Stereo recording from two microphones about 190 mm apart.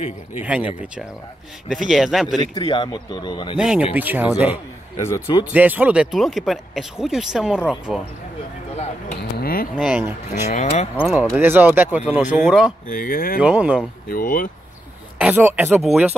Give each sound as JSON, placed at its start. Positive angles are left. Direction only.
{"t": 0.4, "sound": "speech", "side_deg": -5}
{"t": 2.5, "sound": "speech", "side_deg": 25}
{"t": 3.5, "sound": "speech", "side_deg": -5}
{"t": 5.0, "sound": "speech", "side_deg": 15}
{"t": 5.4, "sound": "speech", "side_deg": -10}
{"t": 9.4, "sound": "a sound", "side_deg": 50}
{"t": 9.8, "sound": "speech", "side_deg": -5}
{"t": 10.5, "sound": "speech", "side_deg": 40}
{"t": 11.0, "sound": "speech", "side_deg": -5}
{"t": 12.8, "sound": "speech", "side_deg": 45}
{"t": 13.4, "sound": "speech", "side_deg": -5}
{"t": 14.0, "sound": "speech", "side_deg": 50}
{"t": 15.1, "sound": "speech", "side_deg": -10}